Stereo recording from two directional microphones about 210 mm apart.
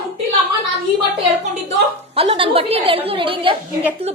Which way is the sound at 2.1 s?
25° right (ahead or behind).